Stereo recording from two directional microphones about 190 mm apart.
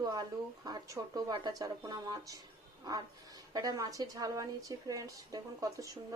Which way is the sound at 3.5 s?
20° right (ahead or behind).